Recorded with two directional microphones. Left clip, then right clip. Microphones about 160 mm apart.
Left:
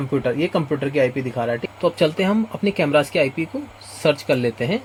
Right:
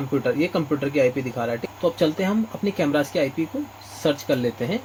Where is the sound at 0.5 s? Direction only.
80° left.